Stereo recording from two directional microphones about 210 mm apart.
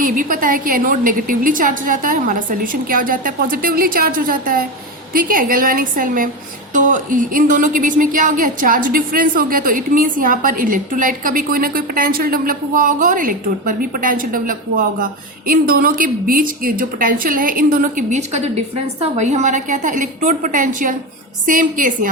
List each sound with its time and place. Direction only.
0.0 s a woman's voice: 40° right (ahead or behind)